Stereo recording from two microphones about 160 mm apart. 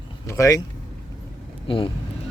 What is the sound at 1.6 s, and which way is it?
Speech, 35° left (ahead or behind).